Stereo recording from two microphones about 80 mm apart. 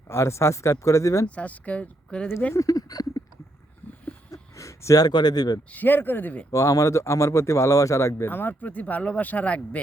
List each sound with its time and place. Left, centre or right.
0.1 s speech: left
1.4 s speech: centre
2.6 s a sound: left
4.3 s a sound: left
5.0 s speech: left
5.7 s speech: left
6.5 s speech: left
8.3 s speech: left